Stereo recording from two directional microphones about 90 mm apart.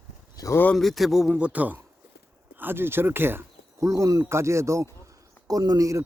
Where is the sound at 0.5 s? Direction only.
20° left (ahead or behind).